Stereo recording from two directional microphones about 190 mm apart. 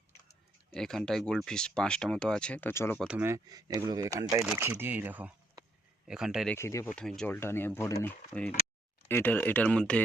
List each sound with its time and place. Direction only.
0.8 s speech: 5° left (ahead or behind)
3.1 s speech: 10° right (ahead or behind)
6.5 s speech: 15° left (ahead or behind)